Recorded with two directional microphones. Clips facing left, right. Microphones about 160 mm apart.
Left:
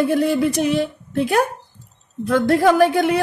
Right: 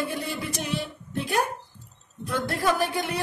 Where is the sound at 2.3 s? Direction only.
90° left.